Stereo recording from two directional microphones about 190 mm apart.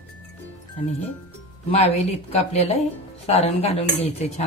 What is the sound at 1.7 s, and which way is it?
Speech, 35° left (ahead or behind).